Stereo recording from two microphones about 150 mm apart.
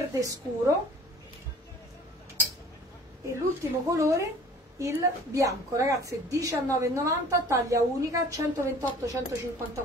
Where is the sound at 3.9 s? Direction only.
20° right (ahead or behind).